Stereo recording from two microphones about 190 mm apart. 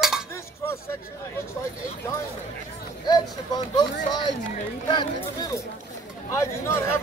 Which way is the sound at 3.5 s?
20° left (ahead or behind).